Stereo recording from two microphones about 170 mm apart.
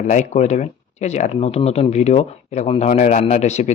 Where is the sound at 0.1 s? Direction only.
45° left (ahead or behind).